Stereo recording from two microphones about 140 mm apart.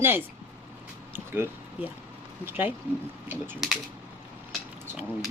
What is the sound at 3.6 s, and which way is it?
Speech, centre (ahead or behind).